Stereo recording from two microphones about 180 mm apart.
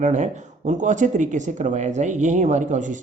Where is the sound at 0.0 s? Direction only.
45° right (ahead or behind).